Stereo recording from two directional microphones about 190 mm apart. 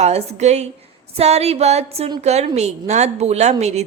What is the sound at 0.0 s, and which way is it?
A woman's voice, 35° right (ahead or behind).